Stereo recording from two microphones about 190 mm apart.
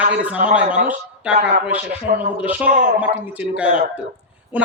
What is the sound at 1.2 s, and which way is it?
Speech, 5° right (ahead or behind).